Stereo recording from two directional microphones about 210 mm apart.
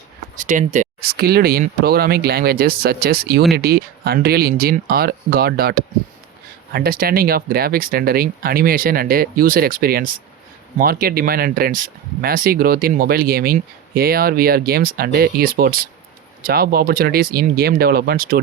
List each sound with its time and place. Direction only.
0.3 s speech: 35° right (ahead or behind)